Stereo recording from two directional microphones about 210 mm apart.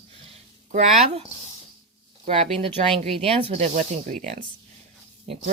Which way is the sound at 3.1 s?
25° right (ahead or behind).